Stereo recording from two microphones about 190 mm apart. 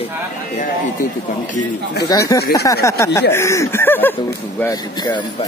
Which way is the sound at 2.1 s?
20° left (ahead or behind).